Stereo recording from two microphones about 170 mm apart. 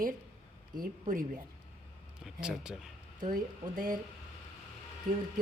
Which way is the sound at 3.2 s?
55° right (ahead or behind).